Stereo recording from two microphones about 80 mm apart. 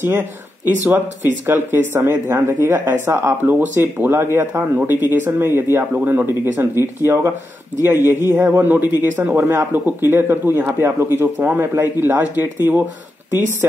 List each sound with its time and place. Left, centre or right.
0.0 s speech: right
6.7 s speech: left
7.8 s speech: right
9.4 s speech: right